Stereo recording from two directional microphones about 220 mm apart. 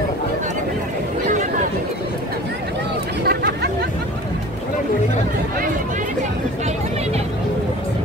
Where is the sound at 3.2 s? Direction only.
45° right (ahead or behind).